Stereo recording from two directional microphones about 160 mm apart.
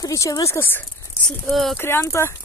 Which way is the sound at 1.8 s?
15° left (ahead or behind).